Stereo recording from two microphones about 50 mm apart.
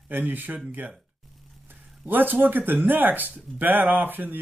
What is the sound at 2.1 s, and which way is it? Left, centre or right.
Speech, right.